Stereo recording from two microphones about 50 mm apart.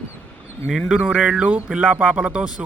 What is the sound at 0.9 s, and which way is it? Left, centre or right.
Speech, right.